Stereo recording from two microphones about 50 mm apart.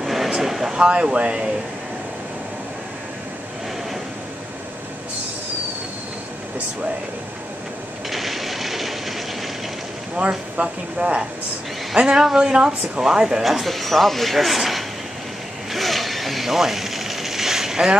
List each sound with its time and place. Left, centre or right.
0.0 s a sound: centre
0.8 s speech: centre
8.1 s a sound: centre
10.2 s speech: right
11.9 s speech: centre
13.4 s speech: centre
15.7 s zipper: centre